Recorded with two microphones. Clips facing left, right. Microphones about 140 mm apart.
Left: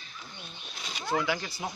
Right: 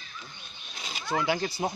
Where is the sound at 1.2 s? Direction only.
35° right (ahead or behind).